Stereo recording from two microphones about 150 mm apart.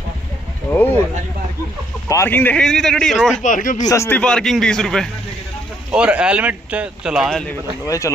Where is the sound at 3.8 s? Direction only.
15° left (ahead or behind).